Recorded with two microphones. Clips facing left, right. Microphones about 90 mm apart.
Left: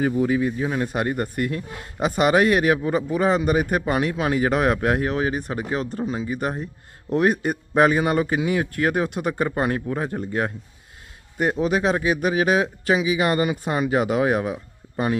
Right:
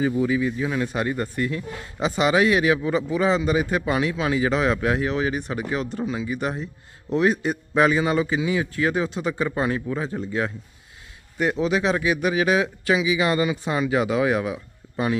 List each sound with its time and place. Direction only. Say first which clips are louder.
0.2 s a man's voice: left 1 dB; 45° left (ahead or behind)
11.6 s a man's voice: left 1 dB; 45° left (ahead or behind)